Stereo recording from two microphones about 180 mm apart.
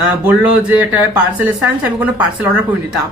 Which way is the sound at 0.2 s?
5° right (ahead or behind).